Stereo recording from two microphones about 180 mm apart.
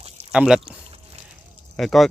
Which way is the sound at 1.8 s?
Centre (ahead or behind).